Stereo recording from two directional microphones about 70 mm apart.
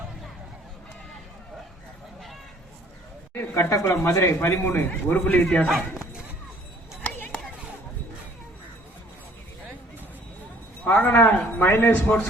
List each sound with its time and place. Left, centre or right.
3.3 s speech: left
4.4 s a man's voice: left
10.8 s a man's voice: left